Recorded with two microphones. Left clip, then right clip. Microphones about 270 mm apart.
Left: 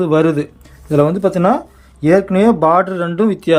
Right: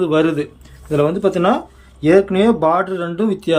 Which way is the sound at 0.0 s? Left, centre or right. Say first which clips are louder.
Left 2 dB; centre.